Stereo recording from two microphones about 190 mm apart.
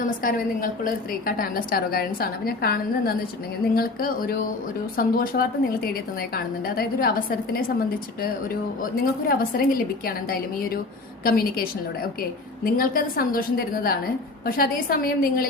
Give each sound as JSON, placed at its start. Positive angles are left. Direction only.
{"t": 0.0, "sound": "a woman's voice", "side_deg": 50}
{"t": 8.8, "sound": "a woman's voice", "side_deg": 50}